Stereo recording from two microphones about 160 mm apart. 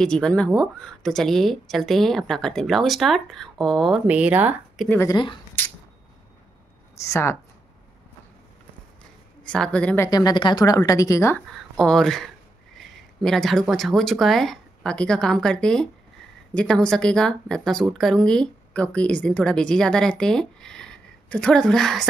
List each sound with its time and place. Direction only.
0.0 s speech: 5° left (ahead or behind)
4.8 s a woman's voice: 15° left (ahead or behind)
5.1 s speech: 30° left (ahead or behind)
7.0 s a woman's voice: 15° left (ahead or behind)
9.4 s a woman's voice: 5° left (ahead or behind)
10.0 s speech: 25° left (ahead or behind)
11.7 s speech: 5° left (ahead or behind)